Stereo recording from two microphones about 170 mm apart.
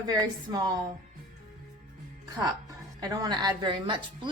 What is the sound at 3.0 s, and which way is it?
A woman's voice, 20° right (ahead or behind).